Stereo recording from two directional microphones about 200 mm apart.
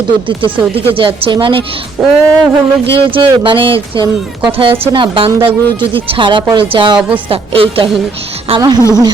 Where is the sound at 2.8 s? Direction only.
25° right (ahead or behind).